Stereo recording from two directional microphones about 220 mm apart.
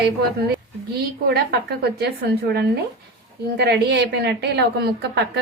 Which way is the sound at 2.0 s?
45° right (ahead or behind).